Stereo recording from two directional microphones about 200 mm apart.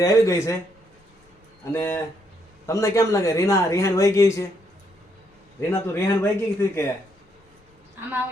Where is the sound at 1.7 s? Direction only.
15° left (ahead or behind).